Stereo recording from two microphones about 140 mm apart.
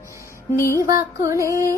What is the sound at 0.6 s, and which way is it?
Music, 20° left (ahead or behind).